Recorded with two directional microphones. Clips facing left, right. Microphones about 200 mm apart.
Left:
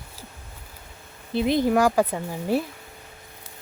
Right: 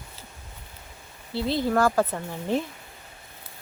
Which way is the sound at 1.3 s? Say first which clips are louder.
Left 4 dB; 15° left (ahead or behind).